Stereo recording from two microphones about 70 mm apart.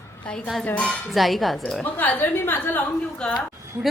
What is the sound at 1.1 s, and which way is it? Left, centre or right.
Speech, centre.